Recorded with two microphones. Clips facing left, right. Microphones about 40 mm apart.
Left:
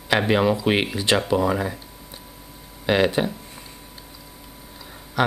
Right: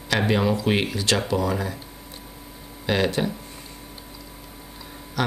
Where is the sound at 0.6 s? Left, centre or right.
Centre.